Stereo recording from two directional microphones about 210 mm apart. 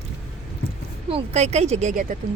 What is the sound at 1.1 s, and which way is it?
Speech, 30° right (ahead or behind).